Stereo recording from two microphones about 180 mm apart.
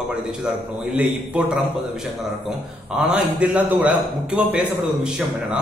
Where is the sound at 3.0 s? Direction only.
5° right (ahead or behind).